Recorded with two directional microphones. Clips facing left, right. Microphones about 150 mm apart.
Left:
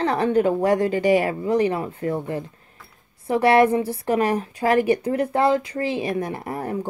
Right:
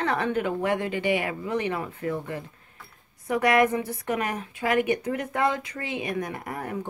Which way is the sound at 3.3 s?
30° left (ahead or behind).